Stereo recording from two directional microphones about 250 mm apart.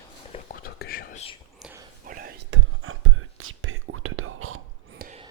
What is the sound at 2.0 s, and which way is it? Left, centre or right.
Whispering, right.